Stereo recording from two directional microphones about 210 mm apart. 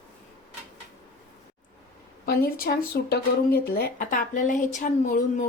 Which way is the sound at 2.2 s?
45° left (ahead or behind).